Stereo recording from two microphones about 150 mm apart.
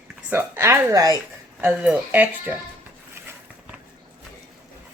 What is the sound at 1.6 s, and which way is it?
Speech, 10° right (ahead or behind).